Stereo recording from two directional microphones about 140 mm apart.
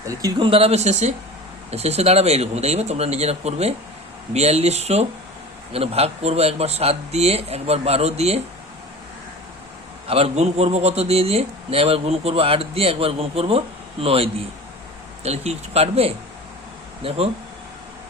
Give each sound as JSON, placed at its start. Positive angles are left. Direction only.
{"t": 0.0, "sound": "a man's voice", "side_deg": -25}
{"t": 10.1, "sound": "a man's voice", "side_deg": -45}